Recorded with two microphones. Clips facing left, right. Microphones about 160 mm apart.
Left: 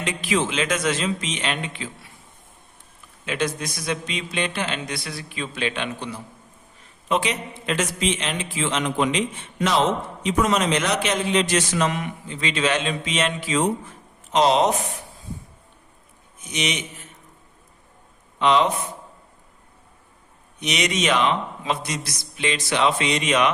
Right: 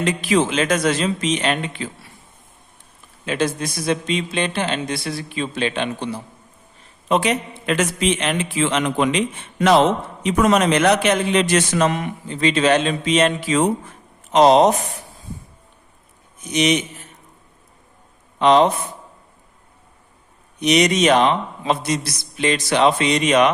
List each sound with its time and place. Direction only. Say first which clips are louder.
0.0 s speech: right 5 dB; 40° right (ahead or behind)
3.2 s speech: right 4 dB; 30° right (ahead or behind)
7.1 s a man's voice: right 5 dB; 50° right (ahead or behind)
11.9 s speech: right 4 dB; 40° right (ahead or behind)
16.4 s speech: right 9 dB; 40° right (ahead or behind)
18.3 s a man's voice: right 5 dB; 40° right (ahead or behind)
20.6 s speech: right 8 dB; 40° right (ahead or behind)